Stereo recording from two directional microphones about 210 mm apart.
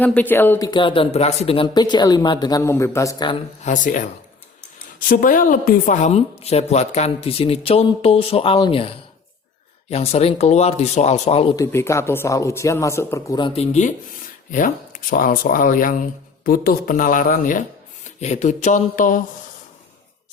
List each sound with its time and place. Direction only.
0.0 s speech: 10° left (ahead or behind)
0.7 s speech: 25° left (ahead or behind)
3.6 s speech: 35° left (ahead or behind)
9.9 s speech: 30° left (ahead or behind)
11.5 s speech: 15° left (ahead or behind); by 19.2 s 40° left (ahead or behind)